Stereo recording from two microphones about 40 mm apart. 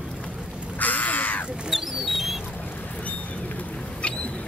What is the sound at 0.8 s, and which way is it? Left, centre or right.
Crow, left.